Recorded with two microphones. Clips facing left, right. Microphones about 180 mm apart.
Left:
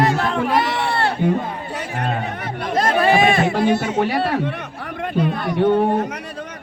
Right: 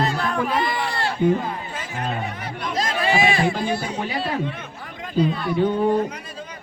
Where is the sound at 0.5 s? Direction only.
80° left.